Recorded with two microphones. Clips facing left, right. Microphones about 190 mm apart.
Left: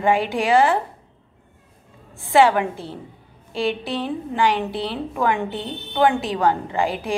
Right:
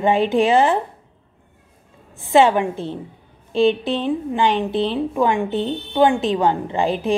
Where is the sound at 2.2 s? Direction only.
20° right (ahead or behind).